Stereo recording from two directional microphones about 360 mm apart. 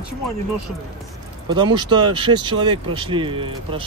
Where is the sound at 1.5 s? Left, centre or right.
Centre.